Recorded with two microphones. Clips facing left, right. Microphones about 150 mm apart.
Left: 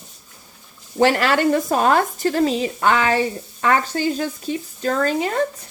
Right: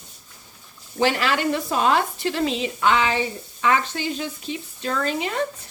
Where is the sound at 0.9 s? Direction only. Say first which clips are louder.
Left 5 dB; 45° left (ahead or behind).